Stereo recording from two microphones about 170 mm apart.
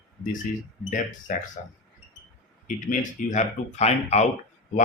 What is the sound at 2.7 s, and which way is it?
Speech, 45° left (ahead or behind).